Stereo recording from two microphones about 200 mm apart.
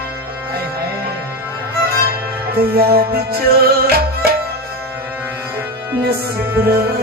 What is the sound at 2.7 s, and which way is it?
Music, 50° right (ahead or behind).